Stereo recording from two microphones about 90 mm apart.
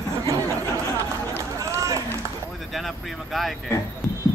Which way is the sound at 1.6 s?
35° right (ahead or behind).